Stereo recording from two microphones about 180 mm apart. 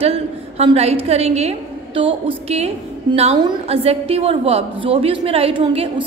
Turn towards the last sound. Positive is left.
turn(degrees=-30)  # may be behind; listen again after turning